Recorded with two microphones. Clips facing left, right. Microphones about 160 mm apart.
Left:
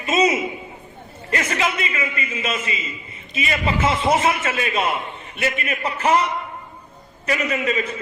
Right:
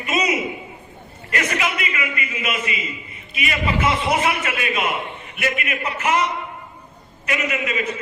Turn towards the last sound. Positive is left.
turn(degrees=35)  # may be behind; listen again after turning